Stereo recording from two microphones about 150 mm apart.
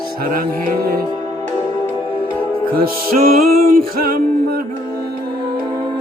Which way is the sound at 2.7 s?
80° right.